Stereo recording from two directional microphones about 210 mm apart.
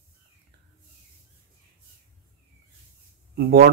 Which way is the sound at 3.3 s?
50° right (ahead or behind).